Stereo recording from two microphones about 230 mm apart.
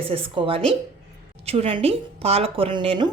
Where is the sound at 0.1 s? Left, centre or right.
Right.